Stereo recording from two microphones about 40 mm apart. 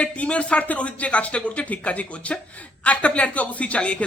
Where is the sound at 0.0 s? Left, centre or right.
Left.